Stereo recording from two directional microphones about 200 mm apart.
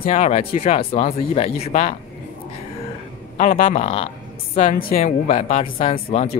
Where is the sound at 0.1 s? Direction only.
30° left (ahead or behind).